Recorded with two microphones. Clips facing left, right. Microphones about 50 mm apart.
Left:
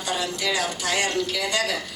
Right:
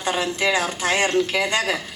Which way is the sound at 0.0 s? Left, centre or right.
Right.